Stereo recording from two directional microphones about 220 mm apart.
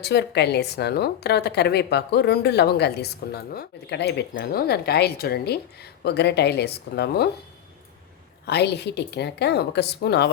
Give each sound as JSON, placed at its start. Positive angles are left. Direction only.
{"t": 0.0, "sound": "a woman's voice", "side_deg": 50}
{"t": 8.4, "sound": "a woman's voice", "side_deg": 50}